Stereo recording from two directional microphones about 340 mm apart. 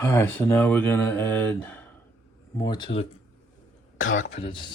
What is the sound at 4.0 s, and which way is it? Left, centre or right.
Throat clearing, left.